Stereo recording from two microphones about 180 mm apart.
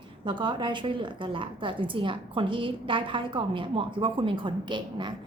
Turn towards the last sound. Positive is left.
turn(degrees=-25)  # may be behind; listen again after turning